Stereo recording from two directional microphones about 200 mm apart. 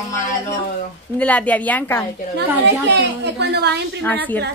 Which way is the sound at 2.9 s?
55° right (ahead or behind).